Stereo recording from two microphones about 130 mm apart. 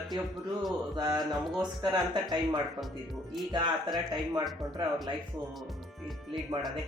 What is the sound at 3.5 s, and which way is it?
Speech, 35° right (ahead or behind).